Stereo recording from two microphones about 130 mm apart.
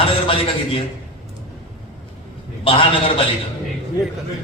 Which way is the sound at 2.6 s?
45° left (ahead or behind).